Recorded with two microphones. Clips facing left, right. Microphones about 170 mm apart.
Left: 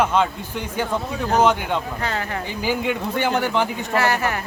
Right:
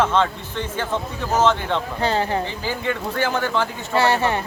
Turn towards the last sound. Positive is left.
turn(degrees=-25)  # may be behind; listen again after turning